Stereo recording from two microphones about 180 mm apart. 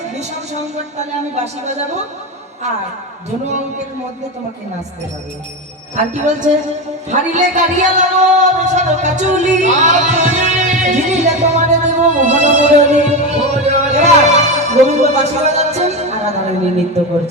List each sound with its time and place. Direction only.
1.6 s a woman's voice: 40° right (ahead or behind)
6.1 s a woman's voice: 40° right (ahead or behind)